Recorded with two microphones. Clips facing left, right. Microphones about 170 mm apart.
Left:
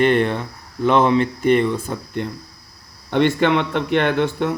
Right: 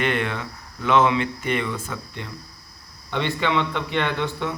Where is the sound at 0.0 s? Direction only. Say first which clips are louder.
Left 8 dB; 35° left (ahead or behind).